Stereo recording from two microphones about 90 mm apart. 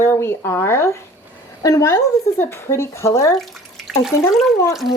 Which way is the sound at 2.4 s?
30° left (ahead or behind).